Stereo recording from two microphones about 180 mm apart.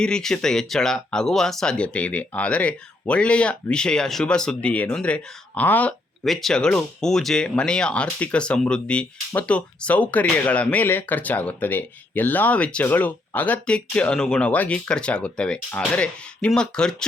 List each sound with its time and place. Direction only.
0.0 s speech: 5° left (ahead or behind)